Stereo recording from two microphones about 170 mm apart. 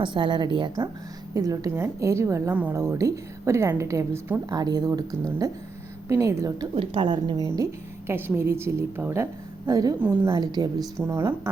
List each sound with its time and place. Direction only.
0.0 s a woman's voice: 30° right (ahead or behind)